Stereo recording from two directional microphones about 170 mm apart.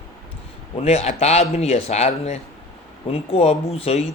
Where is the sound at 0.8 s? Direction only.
40° left (ahead or behind).